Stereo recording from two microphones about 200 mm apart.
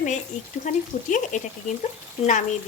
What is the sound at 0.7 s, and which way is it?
Speech, 35° left (ahead or behind).